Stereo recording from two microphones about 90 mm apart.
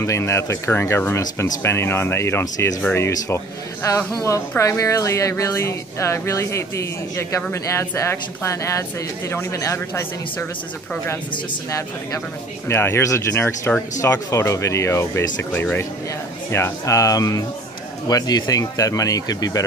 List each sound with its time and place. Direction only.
0.0 s speech: 30° left (ahead or behind)
4.2 s a man's voice: 35° left (ahead or behind)
12.6 s a man's voice: 25° left (ahead or behind); by 19.6 s 45° left (ahead or behind)